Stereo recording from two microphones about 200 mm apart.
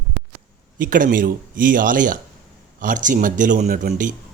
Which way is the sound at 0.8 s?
45° right (ahead or behind).